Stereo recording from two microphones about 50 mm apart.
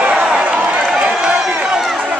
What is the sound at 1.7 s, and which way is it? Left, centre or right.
Run, centre.